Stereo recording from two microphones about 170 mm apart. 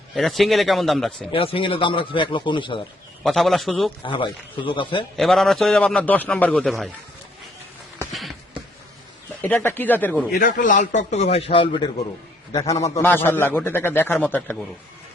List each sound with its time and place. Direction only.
0.1 s a man's voice: centre (ahead or behind)
1.3 s speech: 30° left (ahead or behind)
3.2 s a man's voice: centre (ahead or behind)
4.0 s speech: 30° left (ahead or behind)
5.1 s a man's voice: centre (ahead or behind)
9.4 s speech: 15° left (ahead or behind)
10.3 s a man's voice: 55° left (ahead or behind); by 11.9 s 30° left (ahead or behind)
12.5 s a man's voice: 20° left (ahead or behind)